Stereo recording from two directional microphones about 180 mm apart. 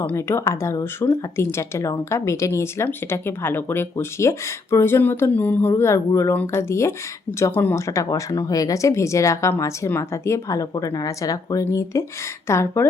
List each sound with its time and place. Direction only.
0.0 s speech: 15° left (ahead or behind)